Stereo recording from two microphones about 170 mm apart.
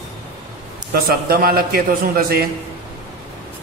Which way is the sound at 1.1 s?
60° right (ahead or behind).